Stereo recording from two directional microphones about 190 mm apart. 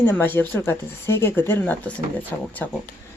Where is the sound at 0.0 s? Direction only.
10° left (ahead or behind).